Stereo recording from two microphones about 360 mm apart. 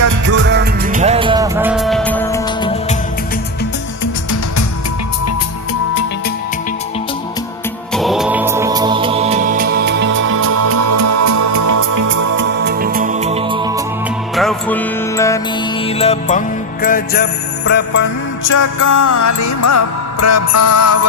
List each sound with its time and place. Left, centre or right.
0.3 s music: right; by 2.7 s centre
4.0 s music: left
7.9 s music: centre; by 12.2 s right
12.4 s music: right; by 13.8 s centre
14.3 s music: centre; by 18.0 s left
18.4 s music: left